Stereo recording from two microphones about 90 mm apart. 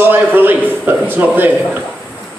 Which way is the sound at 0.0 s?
25° right (ahead or behind).